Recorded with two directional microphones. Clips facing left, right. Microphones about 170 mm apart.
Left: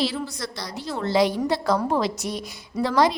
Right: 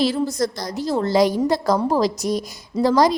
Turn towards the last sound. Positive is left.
turn(degrees=-40)  # may be behind; listen again after turning